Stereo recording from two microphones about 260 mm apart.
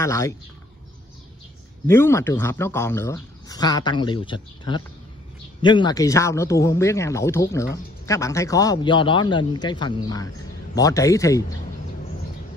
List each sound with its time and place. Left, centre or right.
0.0 s speech: centre
1.9 s a man's voice: centre